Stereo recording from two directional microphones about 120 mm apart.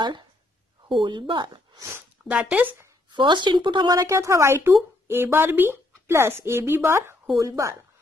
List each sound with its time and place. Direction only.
0.0 s speech: 35° right (ahead or behind)
1.8 s speech: 20° right (ahead or behind)
3.1 s speech: 40° right (ahead or behind)
3.9 s speech: 25° right (ahead or behind)